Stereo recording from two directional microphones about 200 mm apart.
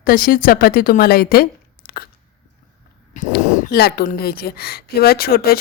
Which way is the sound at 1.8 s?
50° left (ahead or behind).